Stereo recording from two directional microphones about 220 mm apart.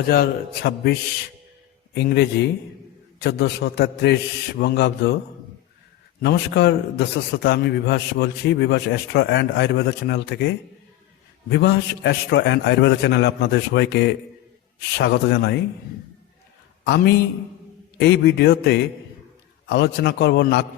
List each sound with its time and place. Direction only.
0.1 s a man's voice: 45° left (ahead or behind)
2.0 s a man's voice: 45° left (ahead or behind)
6.2 s a man's voice: 50° left (ahead or behind)
11.4 s a man's voice: 50° left (ahead or behind)
16.8 s a man's voice: 50° left (ahead or behind)